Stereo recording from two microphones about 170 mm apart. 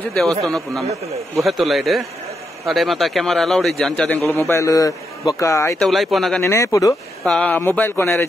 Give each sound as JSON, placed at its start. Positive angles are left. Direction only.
{"t": 0.1, "sound": "a man's voice", "side_deg": 0}
{"t": 5.8, "sound": "a man's voice", "side_deg": 0}
{"t": 6.4, "sound": "speech", "side_deg": 15}
{"t": 7.2, "sound": "speech", "side_deg": 5}